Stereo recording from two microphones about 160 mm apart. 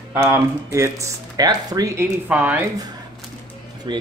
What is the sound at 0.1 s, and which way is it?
Speech, 15° right (ahead or behind).